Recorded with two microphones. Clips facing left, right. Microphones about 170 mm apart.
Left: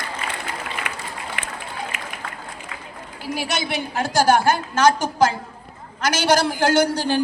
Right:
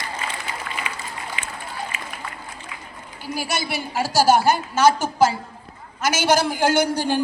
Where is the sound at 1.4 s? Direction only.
65° left (ahead or behind).